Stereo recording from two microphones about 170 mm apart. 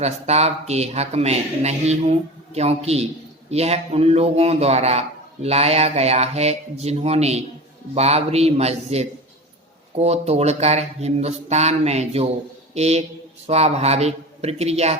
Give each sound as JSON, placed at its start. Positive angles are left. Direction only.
{"t": 0.0, "sound": "a man's voice", "side_deg": -40}